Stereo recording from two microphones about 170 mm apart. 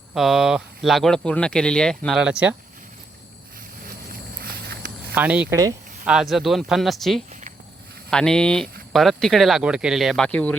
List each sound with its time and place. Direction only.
0.1 s speech: centre (ahead or behind)
4.1 s walk: 60° right (ahead or behind)
5.1 s speech: 10° right (ahead or behind); by 10.5 s 5° left (ahead or behind)